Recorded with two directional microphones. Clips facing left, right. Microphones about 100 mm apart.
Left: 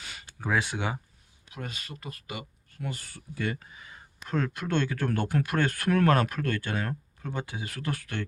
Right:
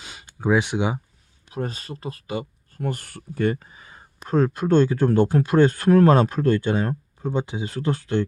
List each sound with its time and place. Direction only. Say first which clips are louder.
0.0 s a sound: right 10 dB; 20° right (ahead or behind)
1.5 s speech: right 10 dB; 35° right (ahead or behind)
2.8 s speech: right 8 dB; 55° right (ahead or behind); by 8.2 s 25° right (ahead or behind)